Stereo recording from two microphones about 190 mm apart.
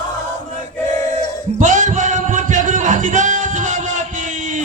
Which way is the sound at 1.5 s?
40° right (ahead or behind).